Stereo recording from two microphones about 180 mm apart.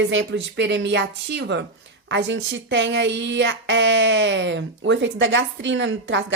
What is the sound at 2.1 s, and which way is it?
A woman's voice, 90° right.